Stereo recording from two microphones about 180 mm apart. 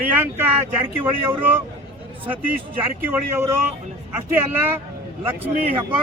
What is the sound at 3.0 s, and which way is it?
Speech, 10° right (ahead or behind).